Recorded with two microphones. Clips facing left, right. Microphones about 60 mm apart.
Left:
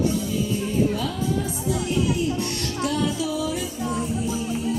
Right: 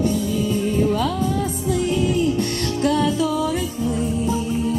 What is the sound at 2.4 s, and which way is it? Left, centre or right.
Music, right.